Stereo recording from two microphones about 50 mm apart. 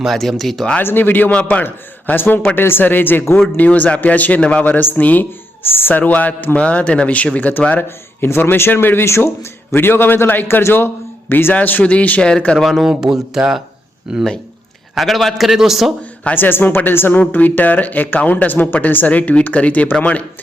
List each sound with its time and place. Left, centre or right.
0.1 s a man's voice: centre
0.8 s a man's voice: left
1.3 s a man's voice: left
1.6 s a man's voice: left
3.6 s a man's voice: left
4.8 s speech: left
7.8 s a man's voice: left
9.0 s a man's voice: left
11.8 s a man's voice: left
12.5 s a man's voice: centre
12.8 s speech: centre
14.9 s a man's voice: centre
16.3 s speech: left